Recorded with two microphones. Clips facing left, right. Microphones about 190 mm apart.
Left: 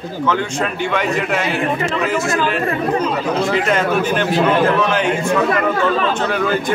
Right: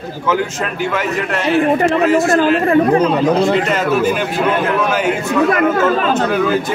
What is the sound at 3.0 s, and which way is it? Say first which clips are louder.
Speech: right 5 dB; 35° right (ahead or behind).